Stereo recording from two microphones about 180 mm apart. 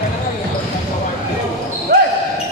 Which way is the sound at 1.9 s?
55° right (ahead or behind).